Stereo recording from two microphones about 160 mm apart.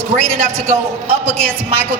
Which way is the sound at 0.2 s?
45° right (ahead or behind).